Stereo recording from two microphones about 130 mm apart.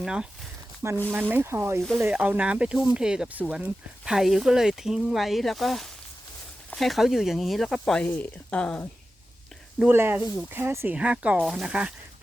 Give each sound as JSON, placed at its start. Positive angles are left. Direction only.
{"t": 0.0, "sound": "speech", "side_deg": -5}
{"t": 0.8, "sound": "speech", "side_deg": -20}
{"t": 9.9, "sound": "speech", "side_deg": -15}